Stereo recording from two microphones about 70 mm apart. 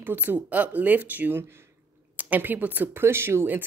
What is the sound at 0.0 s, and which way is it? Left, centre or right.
A woman's voice, right.